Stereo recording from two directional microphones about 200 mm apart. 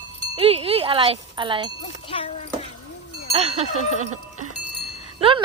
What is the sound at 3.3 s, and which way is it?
Speech, 30° right (ahead or behind).